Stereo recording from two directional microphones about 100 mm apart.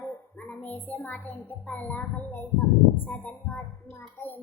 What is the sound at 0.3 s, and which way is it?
A child's voice, 15° left (ahead or behind).